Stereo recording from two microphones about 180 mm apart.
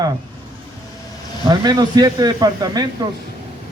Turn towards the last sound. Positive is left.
turn(degrees=-20)  # may be behind; listen again after turning